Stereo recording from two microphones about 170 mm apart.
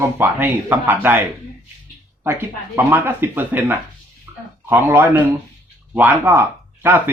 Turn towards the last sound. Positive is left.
turn(degrees=-10)  # may be behind; listen again after turning